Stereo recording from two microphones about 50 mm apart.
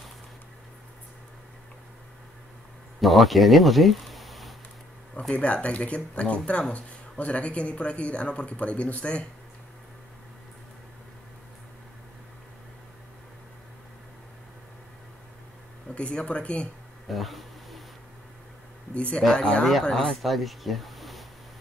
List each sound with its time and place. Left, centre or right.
3.0 s speech: centre
5.3 s speech: left
15.9 s speech: left
17.1 s a sound: centre
18.9 s speech: left
19.8 s speech: centre